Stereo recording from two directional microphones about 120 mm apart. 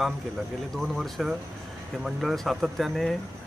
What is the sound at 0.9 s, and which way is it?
Speech, centre (ahead or behind).